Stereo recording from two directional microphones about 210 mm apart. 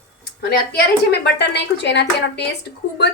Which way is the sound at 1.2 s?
55° left (ahead or behind).